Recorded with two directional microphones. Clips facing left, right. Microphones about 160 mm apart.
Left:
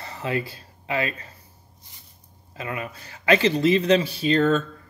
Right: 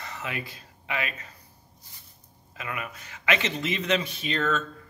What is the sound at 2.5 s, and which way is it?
Speech, 30° left (ahead or behind).